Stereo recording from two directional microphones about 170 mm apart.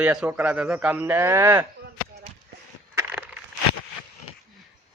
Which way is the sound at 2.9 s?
10° right (ahead or behind).